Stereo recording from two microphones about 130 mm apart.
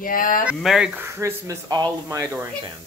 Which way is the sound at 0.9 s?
20° right (ahead or behind).